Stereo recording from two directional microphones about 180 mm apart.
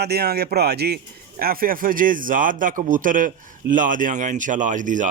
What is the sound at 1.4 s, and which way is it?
A man's voice, 55° right (ahead or behind).